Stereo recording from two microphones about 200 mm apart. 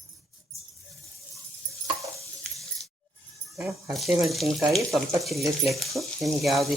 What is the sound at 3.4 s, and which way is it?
Speech, centre (ahead or behind).